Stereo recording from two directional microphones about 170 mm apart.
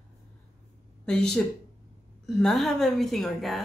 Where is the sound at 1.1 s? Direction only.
5° left (ahead or behind).